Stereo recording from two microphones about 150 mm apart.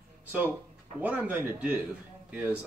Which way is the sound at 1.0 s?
10° right (ahead or behind).